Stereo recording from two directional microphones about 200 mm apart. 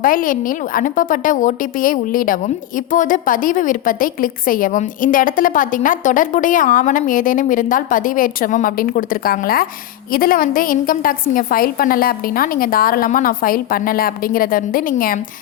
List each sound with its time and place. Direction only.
0.0 s a woman's voice: 45° left (ahead or behind)